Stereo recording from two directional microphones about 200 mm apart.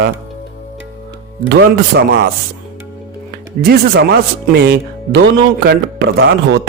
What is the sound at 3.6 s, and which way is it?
Speech, 50° right (ahead or behind).